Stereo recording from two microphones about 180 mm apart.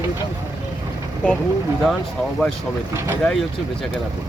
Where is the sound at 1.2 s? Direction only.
5° left (ahead or behind).